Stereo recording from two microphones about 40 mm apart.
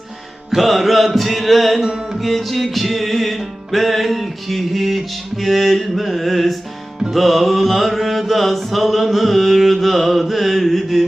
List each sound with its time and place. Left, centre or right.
0.5 s music: centre
1.8 s music: right
2.1 s music: centre